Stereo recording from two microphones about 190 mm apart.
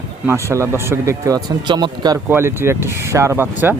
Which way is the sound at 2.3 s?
15° right (ahead or behind).